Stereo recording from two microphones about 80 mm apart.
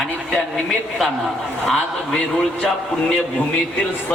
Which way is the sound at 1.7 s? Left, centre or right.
Centre.